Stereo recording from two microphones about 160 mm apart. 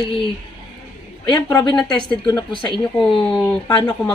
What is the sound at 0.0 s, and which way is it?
Speech, 30° left (ahead or behind).